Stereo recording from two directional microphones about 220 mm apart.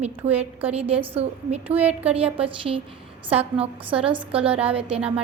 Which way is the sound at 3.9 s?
5° right (ahead or behind).